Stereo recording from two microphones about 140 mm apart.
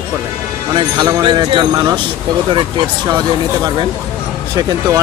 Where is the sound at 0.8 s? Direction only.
30° right (ahead or behind).